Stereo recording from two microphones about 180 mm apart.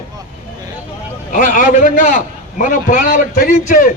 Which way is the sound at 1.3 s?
50° left (ahead or behind).